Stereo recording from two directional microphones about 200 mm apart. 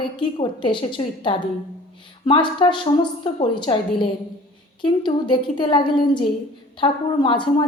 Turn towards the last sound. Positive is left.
turn(degrees=25)  # may be behind; listen again after turning